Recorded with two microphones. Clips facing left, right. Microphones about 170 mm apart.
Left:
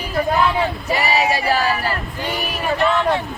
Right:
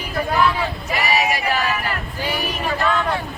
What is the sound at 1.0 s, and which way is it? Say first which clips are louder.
Singing: left 1 dB; 30° left (ahead or behind).